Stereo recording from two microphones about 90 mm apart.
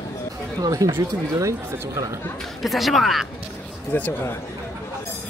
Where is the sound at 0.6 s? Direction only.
45° right (ahead or behind).